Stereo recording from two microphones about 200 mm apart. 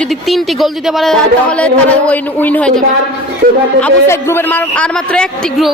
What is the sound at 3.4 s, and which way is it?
Speech, 50° right (ahead or behind).